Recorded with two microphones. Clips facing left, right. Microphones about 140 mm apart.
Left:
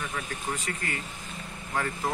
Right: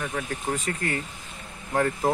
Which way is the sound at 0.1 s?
45° right (ahead or behind).